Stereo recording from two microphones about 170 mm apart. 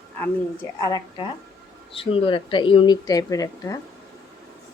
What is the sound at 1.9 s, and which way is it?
Speech, 30° left (ahead or behind).